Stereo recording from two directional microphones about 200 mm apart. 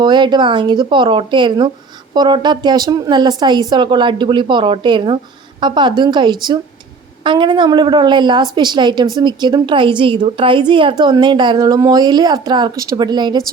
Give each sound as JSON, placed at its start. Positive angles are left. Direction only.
{"t": 0.0, "sound": "a woman's voice", "side_deg": -20}